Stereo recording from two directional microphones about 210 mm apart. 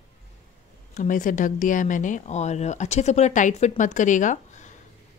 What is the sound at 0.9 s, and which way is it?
A woman's voice, 40° left (ahead or behind).